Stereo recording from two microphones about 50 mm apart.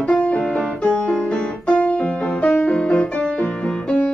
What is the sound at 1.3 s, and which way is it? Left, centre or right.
Keyboard, left.